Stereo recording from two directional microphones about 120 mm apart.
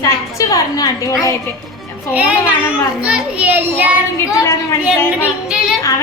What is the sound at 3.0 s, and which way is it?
Speech, 10° right (ahead or behind).